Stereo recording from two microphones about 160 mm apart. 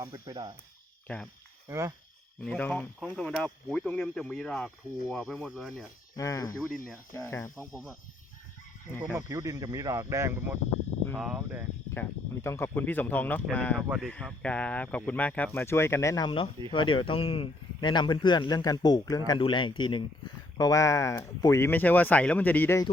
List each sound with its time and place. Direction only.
0.0 s speech: 25° right (ahead or behind)
1.0 s speech: 5° left (ahead or behind)
2.4 s speech: 5° left (ahead or behind)
6.1 s speech: 20° left (ahead or behind)
7.5 s speech: centre (ahead or behind)
9.1 s speech: 20° right (ahead or behind)
11.9 s a man's voice: 15° left (ahead or behind)